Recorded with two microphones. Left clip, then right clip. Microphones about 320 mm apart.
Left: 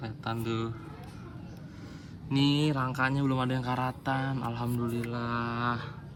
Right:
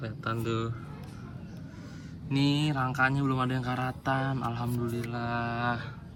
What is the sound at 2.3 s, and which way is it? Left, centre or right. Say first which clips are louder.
A man's voice: left 1 dB; centre.